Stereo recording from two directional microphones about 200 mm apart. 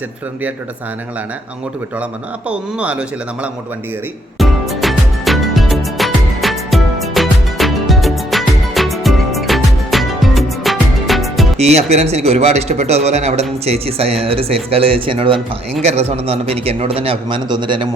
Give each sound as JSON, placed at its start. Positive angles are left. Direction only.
{"t": 2.5, "sound": "speech", "side_deg": -5}
{"t": 4.4, "sound": "music", "side_deg": 0}
{"t": 11.5, "sound": "a man's voice", "side_deg": -30}